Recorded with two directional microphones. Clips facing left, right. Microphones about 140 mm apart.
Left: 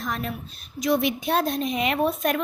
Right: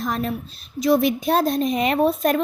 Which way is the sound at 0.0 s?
35° right (ahead or behind).